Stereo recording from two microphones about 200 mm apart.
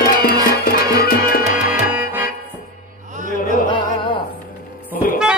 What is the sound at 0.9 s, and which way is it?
Music, 50° left (ahead or behind).